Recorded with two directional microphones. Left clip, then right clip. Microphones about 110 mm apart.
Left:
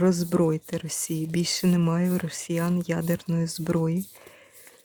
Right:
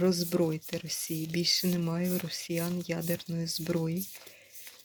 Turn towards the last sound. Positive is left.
turn(degrees=50)  # may be behind; listen again after turning